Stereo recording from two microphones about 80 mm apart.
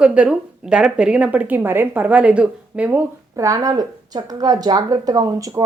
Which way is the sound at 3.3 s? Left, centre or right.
Right.